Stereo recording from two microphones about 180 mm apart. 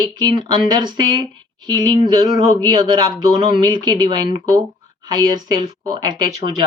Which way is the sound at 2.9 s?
25° right (ahead or behind).